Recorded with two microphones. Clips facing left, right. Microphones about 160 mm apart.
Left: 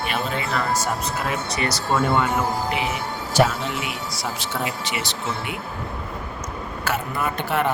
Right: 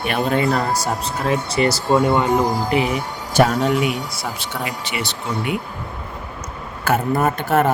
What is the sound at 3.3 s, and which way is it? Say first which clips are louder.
Speech: right 5 dB; 50° right (ahead or behind).